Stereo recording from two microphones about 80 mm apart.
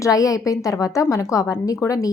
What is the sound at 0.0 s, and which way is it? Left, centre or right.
A woman's voice, left.